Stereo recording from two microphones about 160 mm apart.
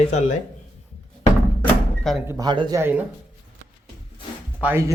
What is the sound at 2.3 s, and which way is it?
Speech, 25° right (ahead or behind).